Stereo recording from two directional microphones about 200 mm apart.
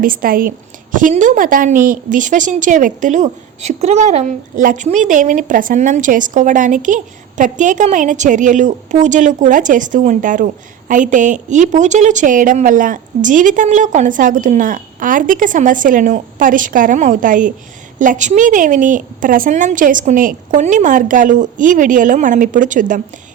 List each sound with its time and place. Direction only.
0.0 s a woman's voice: 45° right (ahead or behind)